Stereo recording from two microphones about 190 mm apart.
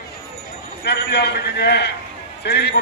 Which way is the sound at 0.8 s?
60° left (ahead or behind).